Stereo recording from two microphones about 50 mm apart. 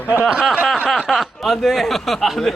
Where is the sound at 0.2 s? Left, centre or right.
Centre.